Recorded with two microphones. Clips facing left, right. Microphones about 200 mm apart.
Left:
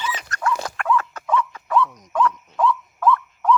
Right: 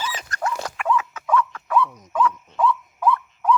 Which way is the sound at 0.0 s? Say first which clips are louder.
Left 1 dB; 35° right (ahead or behind).